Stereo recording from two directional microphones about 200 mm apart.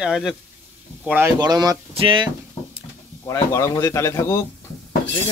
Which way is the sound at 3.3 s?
15° left (ahead or behind).